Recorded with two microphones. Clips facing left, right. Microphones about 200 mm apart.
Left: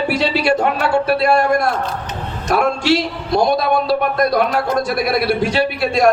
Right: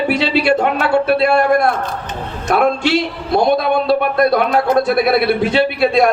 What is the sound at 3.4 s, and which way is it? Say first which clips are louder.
A man's voice: right 2 dB; 60° right (ahead or behind).